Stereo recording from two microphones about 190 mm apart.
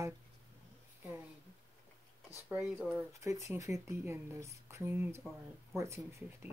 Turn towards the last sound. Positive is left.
turn(degrees=-15)  # may be behind; listen again after turning